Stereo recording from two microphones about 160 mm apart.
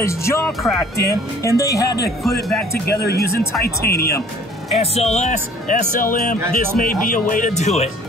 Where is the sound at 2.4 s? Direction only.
Centre (ahead or behind).